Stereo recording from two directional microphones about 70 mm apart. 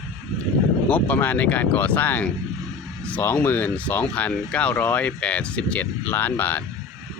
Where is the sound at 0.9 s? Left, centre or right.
Left.